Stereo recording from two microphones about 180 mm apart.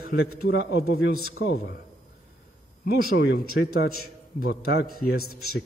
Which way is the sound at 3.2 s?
65° left (ahead or behind).